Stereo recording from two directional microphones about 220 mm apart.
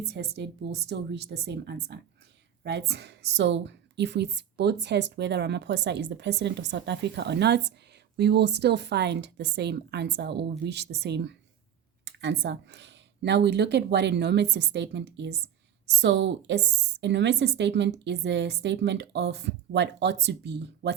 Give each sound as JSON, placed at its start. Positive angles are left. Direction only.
{"t": 0.1, "sound": "a woman's voice", "side_deg": -50}